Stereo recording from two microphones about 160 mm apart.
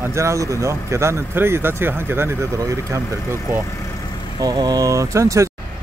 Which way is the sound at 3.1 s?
15° left (ahead or behind).